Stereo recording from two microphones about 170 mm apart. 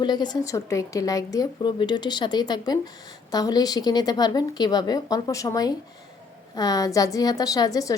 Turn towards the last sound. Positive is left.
turn(degrees=20)  # may be behind; listen again after turning